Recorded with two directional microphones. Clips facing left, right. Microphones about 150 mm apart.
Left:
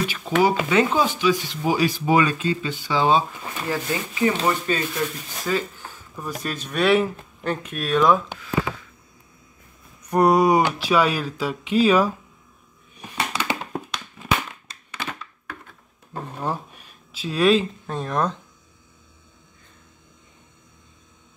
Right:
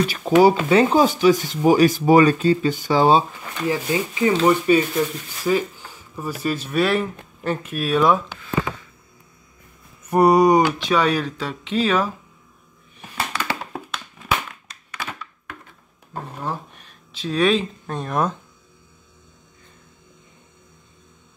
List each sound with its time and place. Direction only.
0.1 s speech: 35° right (ahead or behind)
3.7 s speech: 20° right (ahead or behind); by 8.8 s centre (ahead or behind)
10.0 s speech: 5° right (ahead or behind)
13.3 s a sound: 20° left (ahead or behind)
14.7 s crushing: 25° left (ahead or behind)
16.4 s speech: 10° left (ahead or behind); by 18.4 s 5° right (ahead or behind)